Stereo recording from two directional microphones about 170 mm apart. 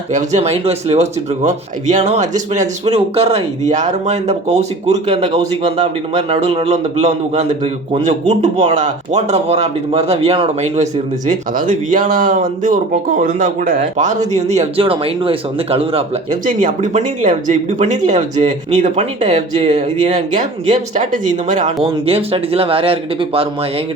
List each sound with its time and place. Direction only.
0.1 s speech: 45° right (ahead or behind)
2.8 s speech: 35° right (ahead or behind)
11.3 s speech: 50° right (ahead or behind); by 16.0 s 35° right (ahead or behind)
16.3 s speech: 50° right (ahead or behind)
22.0 s speech: 35° right (ahead or behind)